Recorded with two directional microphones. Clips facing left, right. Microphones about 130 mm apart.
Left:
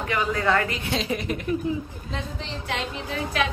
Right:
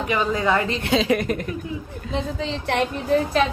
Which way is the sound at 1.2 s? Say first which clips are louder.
Right 4 dB; 45° right (ahead or behind).